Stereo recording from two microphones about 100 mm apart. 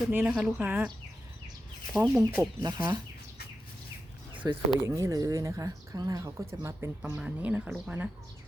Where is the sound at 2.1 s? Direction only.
30° right (ahead or behind).